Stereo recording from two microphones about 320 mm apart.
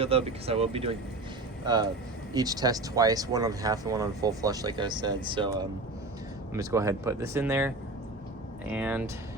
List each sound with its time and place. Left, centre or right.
0.0 s speech: centre
8.7 s speech: centre